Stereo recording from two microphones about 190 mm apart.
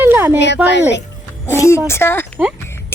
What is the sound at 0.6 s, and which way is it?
Speech, 65° left (ahead or behind).